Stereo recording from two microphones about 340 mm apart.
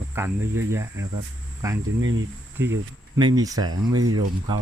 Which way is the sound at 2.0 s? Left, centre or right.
Right.